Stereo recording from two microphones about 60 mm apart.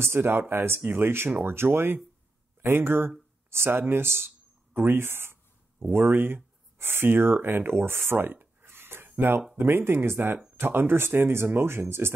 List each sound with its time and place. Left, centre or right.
0.0 s speech: right